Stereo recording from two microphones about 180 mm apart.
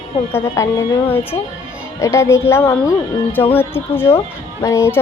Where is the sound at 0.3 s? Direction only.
15° left (ahead or behind).